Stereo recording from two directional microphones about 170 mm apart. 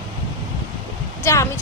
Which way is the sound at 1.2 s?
15° left (ahead or behind).